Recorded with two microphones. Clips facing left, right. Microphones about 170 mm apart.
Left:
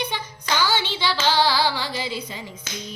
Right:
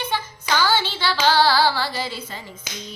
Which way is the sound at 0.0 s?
15° left (ahead or behind).